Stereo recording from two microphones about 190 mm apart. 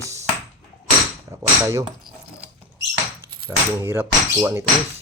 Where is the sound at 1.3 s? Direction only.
15° right (ahead or behind).